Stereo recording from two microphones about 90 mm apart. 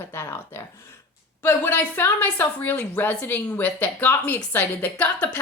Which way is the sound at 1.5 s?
20° left (ahead or behind).